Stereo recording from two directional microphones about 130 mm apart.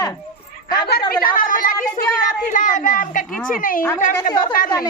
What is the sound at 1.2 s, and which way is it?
A child's voice, 90° left.